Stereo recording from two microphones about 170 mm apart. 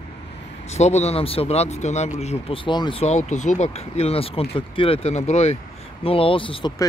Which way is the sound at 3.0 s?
45° left (ahead or behind).